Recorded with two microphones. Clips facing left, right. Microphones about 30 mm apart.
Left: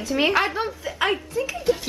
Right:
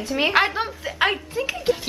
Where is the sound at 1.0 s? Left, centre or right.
Right.